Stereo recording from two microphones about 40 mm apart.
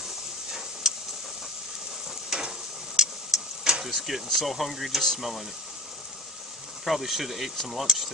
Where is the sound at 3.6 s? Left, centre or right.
Centre.